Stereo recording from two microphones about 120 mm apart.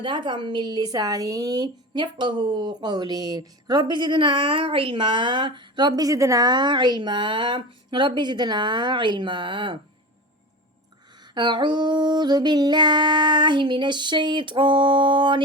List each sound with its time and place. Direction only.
0.0 s speech: 40° right (ahead or behind)
11.3 s speech: 40° right (ahead or behind)